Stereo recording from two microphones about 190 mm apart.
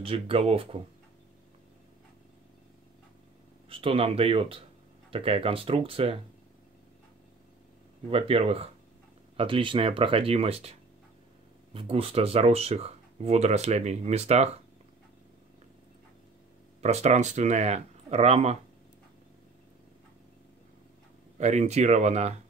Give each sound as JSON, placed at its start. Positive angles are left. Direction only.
{"t": 0.0, "sound": "speech", "side_deg": -30}
{"t": 3.6, "sound": "speech", "side_deg": -30}
{"t": 8.1, "sound": "speech", "side_deg": -30}
{"t": 16.8, "sound": "speech", "side_deg": -35}
{"t": 21.4, "sound": "speech", "side_deg": -35}